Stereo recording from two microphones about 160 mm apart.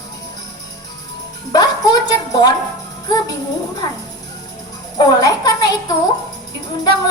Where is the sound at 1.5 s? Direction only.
25° left (ahead or behind).